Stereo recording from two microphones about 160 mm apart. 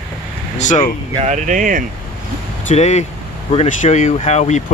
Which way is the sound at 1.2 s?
50° right (ahead or behind).